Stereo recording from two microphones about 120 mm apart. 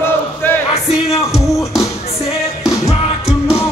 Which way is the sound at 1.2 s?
25° left (ahead or behind).